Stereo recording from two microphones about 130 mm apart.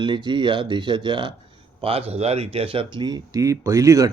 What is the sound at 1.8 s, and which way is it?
Speech, 50° right (ahead or behind).